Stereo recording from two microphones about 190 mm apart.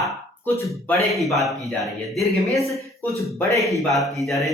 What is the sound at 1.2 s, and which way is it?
Speech, centre (ahead or behind).